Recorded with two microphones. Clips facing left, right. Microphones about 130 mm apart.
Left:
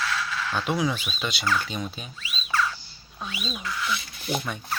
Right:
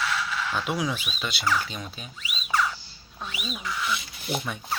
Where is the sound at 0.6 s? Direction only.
10° right (ahead or behind).